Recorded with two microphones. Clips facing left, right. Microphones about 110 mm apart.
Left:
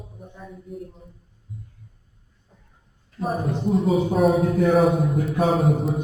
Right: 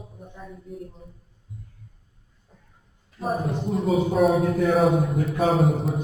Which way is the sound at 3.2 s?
Centre (ahead or behind).